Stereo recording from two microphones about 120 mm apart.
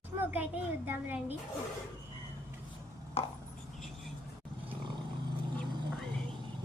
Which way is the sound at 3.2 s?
60° left (ahead or behind).